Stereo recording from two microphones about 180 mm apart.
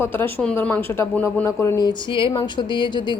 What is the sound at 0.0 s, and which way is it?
A woman's voice, 10° left (ahead or behind).